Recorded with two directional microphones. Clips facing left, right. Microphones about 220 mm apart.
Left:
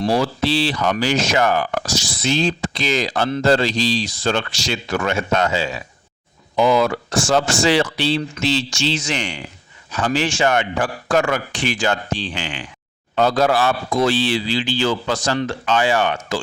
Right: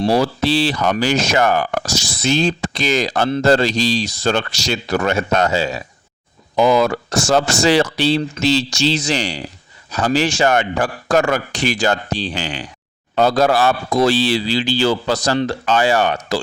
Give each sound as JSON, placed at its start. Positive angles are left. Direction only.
{"t": 0.0, "sound": "speech", "side_deg": -40}